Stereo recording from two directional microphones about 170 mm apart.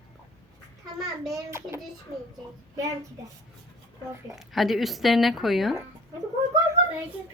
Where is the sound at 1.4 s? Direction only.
15° right (ahead or behind).